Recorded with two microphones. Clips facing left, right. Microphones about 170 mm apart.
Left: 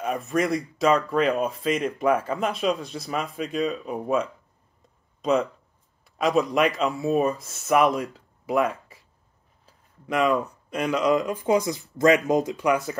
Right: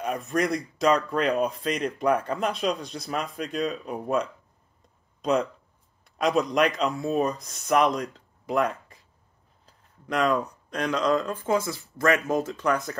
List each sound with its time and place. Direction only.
0.0 s speech: centre (ahead or behind)
9.7 s a sound: 5° left (ahead or behind)
10.7 s speech: 5° left (ahead or behind)